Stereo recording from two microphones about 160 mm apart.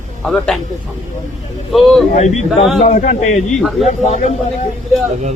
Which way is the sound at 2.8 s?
50° left (ahead or behind).